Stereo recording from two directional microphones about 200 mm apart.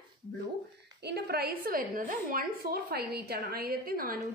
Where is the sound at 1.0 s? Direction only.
55° right (ahead or behind).